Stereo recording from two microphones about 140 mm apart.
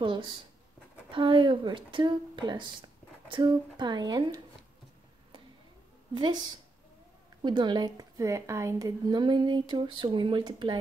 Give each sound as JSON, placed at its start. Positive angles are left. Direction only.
{"t": 0.0, "sound": "a woman's voice", "side_deg": -35}
{"t": 6.1, "sound": "a woman's voice", "side_deg": -35}
{"t": 7.4, "sound": "a woman's voice", "side_deg": -30}